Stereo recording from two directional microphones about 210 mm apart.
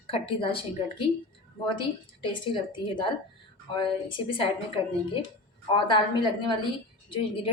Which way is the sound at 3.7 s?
25° left (ahead or behind).